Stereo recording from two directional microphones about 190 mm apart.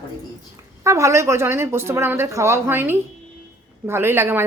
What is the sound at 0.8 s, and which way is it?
A woman's voice, 15° right (ahead or behind).